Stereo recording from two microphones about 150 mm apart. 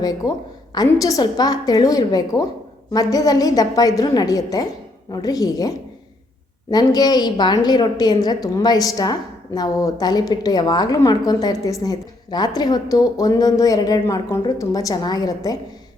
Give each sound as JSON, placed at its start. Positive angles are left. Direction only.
{"t": 0.0, "sound": "a woman's voice", "side_deg": 25}